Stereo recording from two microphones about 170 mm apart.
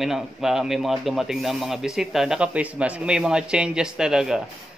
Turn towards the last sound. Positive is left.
turn(degrees=-5)  # may be behind; listen again after turning